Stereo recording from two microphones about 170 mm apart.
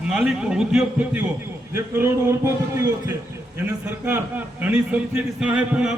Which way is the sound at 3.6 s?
10° right (ahead or behind).